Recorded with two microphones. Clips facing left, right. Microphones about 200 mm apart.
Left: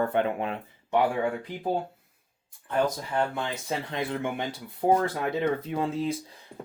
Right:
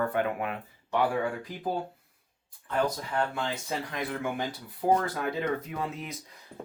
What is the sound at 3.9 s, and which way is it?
Speech, 25° left (ahead or behind).